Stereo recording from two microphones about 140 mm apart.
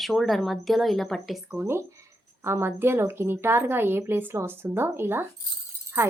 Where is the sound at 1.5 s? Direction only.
15° right (ahead or behind).